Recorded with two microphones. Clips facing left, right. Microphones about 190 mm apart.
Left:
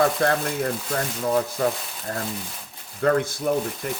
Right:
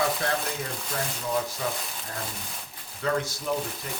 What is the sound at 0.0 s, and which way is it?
Speech, 55° left (ahead or behind).